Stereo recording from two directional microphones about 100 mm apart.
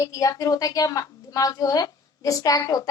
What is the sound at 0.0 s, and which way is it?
A woman's voice, 35° left (ahead or behind).